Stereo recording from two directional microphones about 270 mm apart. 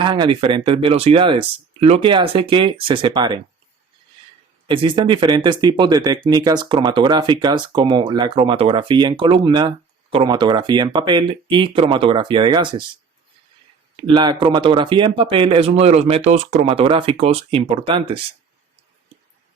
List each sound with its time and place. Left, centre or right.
0.0 s speech: centre
4.6 s speech: centre
13.9 s speech: centre